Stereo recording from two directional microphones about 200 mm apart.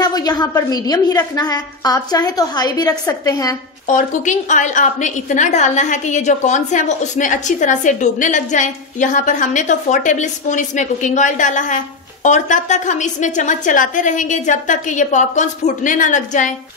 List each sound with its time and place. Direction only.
0.0 s a woman's voice: 20° left (ahead or behind)
3.8 s a woman's voice: 40° left (ahead or behind)